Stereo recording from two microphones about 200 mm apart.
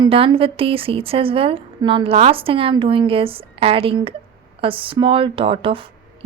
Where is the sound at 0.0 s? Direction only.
25° right (ahead or behind).